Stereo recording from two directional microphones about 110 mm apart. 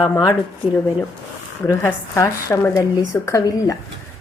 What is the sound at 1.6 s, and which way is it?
A woman's voice, 25° left (ahead or behind).